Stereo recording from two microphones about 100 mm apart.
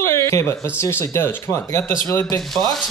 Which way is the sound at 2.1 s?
35° left (ahead or behind).